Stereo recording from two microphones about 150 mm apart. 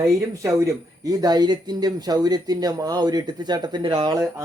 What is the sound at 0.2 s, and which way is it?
Speech, 20° right (ahead or behind).